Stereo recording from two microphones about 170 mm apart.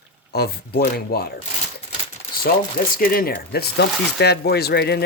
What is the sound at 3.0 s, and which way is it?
Speech, 60° left (ahead or behind).